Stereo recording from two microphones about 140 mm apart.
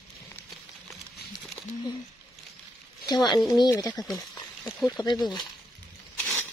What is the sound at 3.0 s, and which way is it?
Speech, 30° left (ahead or behind).